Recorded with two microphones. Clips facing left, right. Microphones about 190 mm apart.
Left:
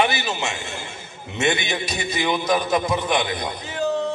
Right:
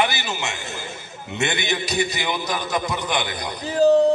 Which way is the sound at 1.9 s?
25° left (ahead or behind).